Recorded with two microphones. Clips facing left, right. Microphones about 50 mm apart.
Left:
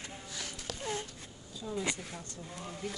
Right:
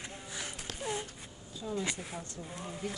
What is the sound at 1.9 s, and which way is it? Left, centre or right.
Speech, centre.